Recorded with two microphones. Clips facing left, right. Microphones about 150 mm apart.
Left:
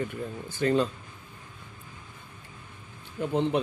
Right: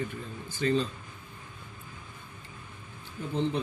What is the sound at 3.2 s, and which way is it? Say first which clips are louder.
Speech: left 4 dB; 65° left (ahead or behind).